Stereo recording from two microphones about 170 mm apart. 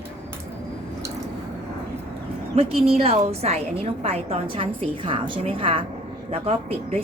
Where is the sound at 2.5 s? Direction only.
35° right (ahead or behind).